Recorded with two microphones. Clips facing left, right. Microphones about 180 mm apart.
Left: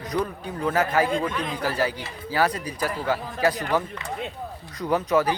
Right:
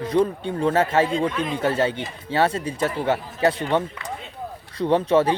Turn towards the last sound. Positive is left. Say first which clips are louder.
# right 4 dB
turn(degrees=-30)  # may be behind; listen again after turning